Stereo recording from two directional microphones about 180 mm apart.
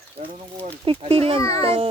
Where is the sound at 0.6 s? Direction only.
30° right (ahead or behind).